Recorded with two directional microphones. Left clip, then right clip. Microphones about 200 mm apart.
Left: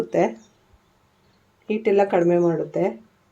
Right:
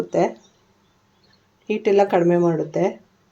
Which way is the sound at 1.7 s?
10° right (ahead or behind).